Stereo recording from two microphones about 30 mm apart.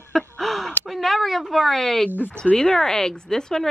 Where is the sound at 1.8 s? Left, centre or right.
Centre.